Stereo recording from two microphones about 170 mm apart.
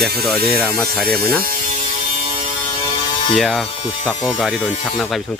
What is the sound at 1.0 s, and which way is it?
Speech, 65° right (ahead or behind).